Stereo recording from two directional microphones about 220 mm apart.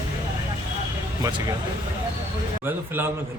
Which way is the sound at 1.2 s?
15° right (ahead or behind).